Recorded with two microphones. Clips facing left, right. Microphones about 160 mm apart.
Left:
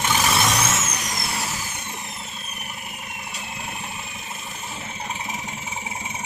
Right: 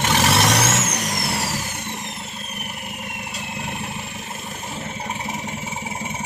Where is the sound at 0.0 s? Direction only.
75° right (ahead or behind).